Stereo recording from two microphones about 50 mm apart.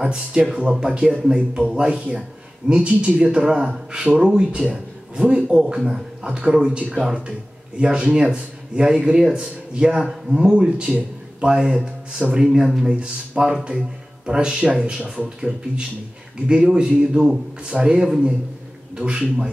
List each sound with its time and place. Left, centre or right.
0.0 s a man's voice: centre
6.2 s speech: centre